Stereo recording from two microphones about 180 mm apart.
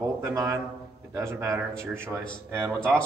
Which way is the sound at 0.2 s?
15° right (ahead or behind).